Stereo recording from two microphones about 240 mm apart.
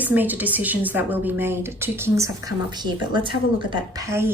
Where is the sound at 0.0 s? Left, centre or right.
Centre.